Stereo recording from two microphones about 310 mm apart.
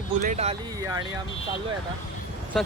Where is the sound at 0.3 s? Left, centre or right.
Centre.